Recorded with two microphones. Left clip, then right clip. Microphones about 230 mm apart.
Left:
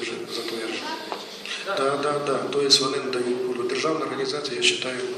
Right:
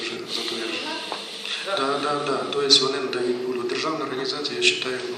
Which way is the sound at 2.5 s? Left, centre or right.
Right.